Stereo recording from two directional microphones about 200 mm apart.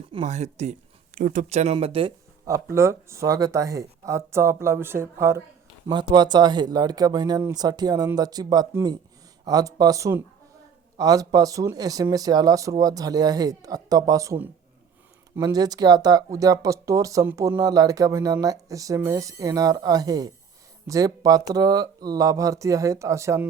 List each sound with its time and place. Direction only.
0.1 s speech: 30° right (ahead or behind)
2.5 s speech: 15° right (ahead or behind)